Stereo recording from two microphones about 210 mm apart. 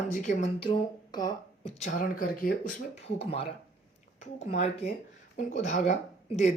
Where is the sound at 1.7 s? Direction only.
35° left (ahead or behind).